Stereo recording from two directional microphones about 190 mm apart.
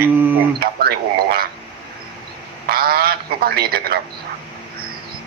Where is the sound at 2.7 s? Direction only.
50° right (ahead or behind).